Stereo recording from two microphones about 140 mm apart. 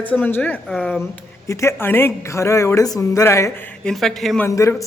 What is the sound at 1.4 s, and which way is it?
Speech, 20° left (ahead or behind).